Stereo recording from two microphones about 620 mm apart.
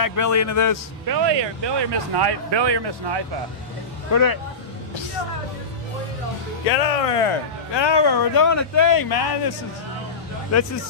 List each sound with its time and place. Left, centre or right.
0.0 s a man's voice: left
1.0 s speech: right
4.1 s speech: left
6.7 s speech: left
10.5 s a man's voice: left